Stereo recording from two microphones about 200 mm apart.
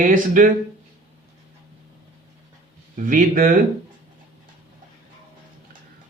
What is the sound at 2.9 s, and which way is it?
Speech, 40° right (ahead or behind).